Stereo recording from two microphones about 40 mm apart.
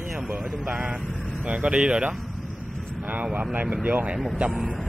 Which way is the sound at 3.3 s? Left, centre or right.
Right.